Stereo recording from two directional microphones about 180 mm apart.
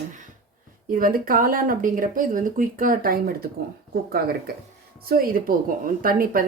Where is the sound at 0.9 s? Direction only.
50° right (ahead or behind).